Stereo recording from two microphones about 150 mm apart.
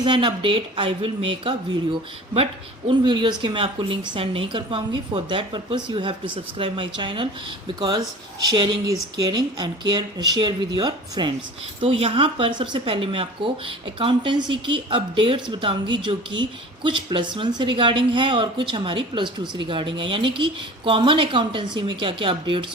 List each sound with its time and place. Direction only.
0.0 s speech: 30° right (ahead or behind)